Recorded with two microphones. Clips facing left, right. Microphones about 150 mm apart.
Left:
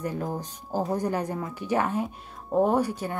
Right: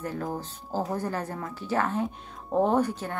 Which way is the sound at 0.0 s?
15° left (ahead or behind).